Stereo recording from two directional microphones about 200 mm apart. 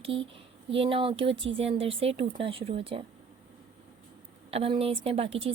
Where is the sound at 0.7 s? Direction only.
25° right (ahead or behind).